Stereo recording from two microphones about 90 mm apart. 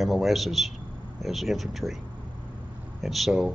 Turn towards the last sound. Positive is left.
turn(degrees=0)  # may be behind; listen again after turning